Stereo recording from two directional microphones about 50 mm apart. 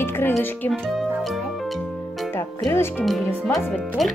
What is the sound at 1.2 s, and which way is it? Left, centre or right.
Music, centre.